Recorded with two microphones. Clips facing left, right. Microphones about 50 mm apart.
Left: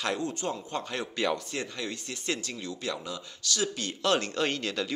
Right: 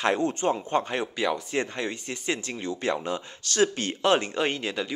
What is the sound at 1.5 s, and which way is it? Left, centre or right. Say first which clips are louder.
Speech: right 6 dB; right.